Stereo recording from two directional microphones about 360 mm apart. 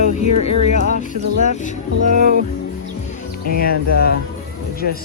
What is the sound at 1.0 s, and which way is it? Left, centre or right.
Speech, centre.